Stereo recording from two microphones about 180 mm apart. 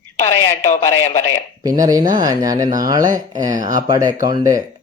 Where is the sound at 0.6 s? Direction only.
40° left (ahead or behind).